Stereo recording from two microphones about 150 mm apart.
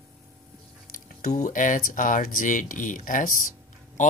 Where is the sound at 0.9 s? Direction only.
60° left (ahead or behind).